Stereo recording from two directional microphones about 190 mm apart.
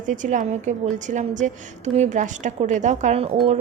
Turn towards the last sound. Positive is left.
turn(degrees=-35)  # may be behind; listen again after turning